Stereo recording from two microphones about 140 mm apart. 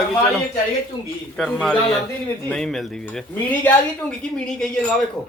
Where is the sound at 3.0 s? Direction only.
10° left (ahead or behind).